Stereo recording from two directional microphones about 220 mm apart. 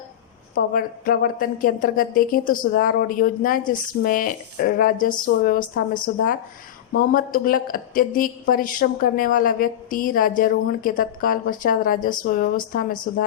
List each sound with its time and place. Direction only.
0.5 s speech: 40° left (ahead or behind)
6.9 s speech: 40° left (ahead or behind)